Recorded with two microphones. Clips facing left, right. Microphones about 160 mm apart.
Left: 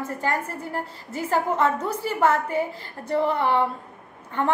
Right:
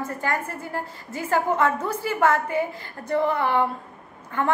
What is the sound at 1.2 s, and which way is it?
A woman's voice, 30° left (ahead or behind).